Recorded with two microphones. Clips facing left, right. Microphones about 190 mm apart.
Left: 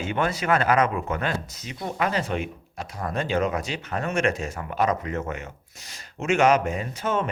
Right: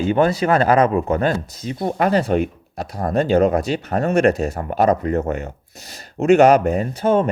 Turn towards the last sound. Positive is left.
turn(degrees=-35)  # may be behind; listen again after turning